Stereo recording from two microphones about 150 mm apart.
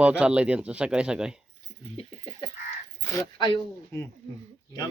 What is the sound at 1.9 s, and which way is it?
Dog, 40° left (ahead or behind).